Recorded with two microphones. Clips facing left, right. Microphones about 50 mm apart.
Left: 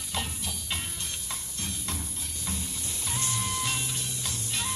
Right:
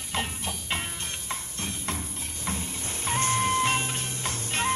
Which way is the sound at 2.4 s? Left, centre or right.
Right.